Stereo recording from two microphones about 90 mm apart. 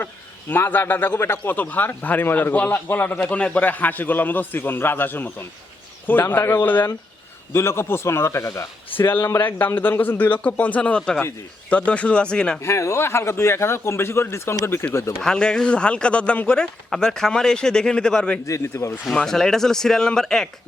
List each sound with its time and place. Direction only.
0.0 s a man's voice: 25° left (ahead or behind)
12.6 s a man's voice: 35° left (ahead or behind)
15.2 s speech: 10° left (ahead or behind)
18.4 s a man's voice: 35° left (ahead or behind)
19.1 s speech: 5° left (ahead or behind)